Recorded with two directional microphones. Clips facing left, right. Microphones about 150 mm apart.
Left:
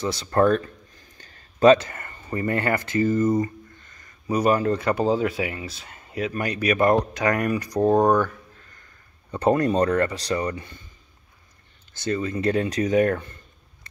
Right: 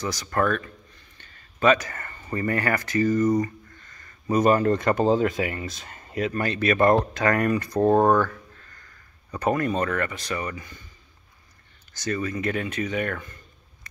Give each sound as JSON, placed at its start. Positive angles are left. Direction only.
{"t": 0.0, "sound": "speech", "side_deg": 25}
{"t": 1.1, "sound": "a sound", "side_deg": 40}
{"t": 1.9, "sound": "speech", "side_deg": 20}
{"t": 4.3, "sound": "speech", "side_deg": 10}
{"t": 6.4, "sound": "speech", "side_deg": 15}
{"t": 7.8, "sound": "speech", "side_deg": 0}
{"t": 9.3, "sound": "speech", "side_deg": 30}
{"t": 12.0, "sound": "speech", "side_deg": 25}